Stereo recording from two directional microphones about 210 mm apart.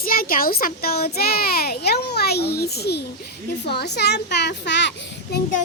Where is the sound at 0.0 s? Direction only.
45° left (ahead or behind).